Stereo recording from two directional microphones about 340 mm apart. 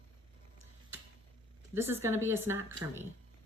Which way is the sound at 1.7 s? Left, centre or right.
Centre.